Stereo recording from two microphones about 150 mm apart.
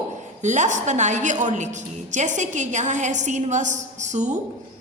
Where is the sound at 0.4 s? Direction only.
55° right (ahead or behind).